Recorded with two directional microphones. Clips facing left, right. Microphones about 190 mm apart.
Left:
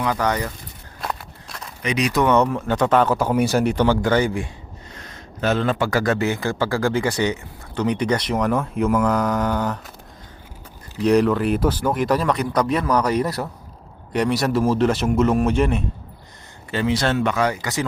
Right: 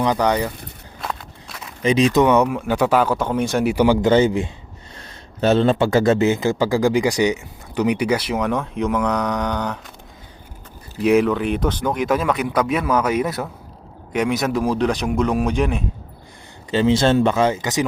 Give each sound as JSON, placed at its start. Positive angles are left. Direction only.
{"t": 0.0, "sound": "speech", "side_deg": -20}
{"t": 1.0, "sound": "walk", "side_deg": 0}
{"t": 1.8, "sound": "speech", "side_deg": -25}
{"t": 3.6, "sound": "speech", "side_deg": -10}
{"t": 11.0, "sound": "speech", "side_deg": -5}
{"t": 16.7, "sound": "speech", "side_deg": -25}